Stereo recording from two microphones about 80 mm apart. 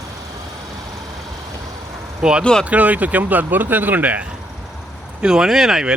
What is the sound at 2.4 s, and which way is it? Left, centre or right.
Speech, centre.